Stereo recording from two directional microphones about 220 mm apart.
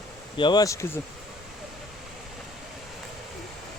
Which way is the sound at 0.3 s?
20° left (ahead or behind).